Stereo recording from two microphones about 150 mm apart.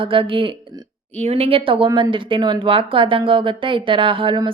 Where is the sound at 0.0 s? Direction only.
35° right (ahead or behind).